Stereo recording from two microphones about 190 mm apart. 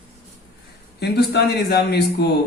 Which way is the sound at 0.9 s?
60° left (ahead or behind).